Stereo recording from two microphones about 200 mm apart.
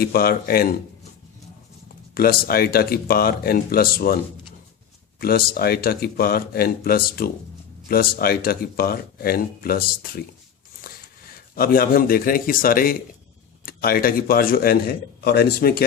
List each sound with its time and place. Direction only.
0.0 s speech: 50° left (ahead or behind)
2.1 s speech: 50° left (ahead or behind)
5.2 s speech: 50° left (ahead or behind)